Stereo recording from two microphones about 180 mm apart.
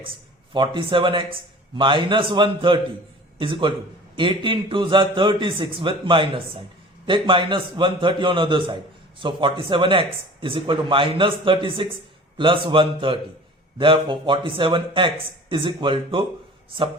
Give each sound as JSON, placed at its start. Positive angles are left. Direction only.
{"t": 0.5, "sound": "a man's voice", "side_deg": -25}